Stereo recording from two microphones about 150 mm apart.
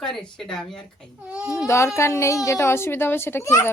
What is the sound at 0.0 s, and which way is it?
Speech, 5° left (ahead or behind).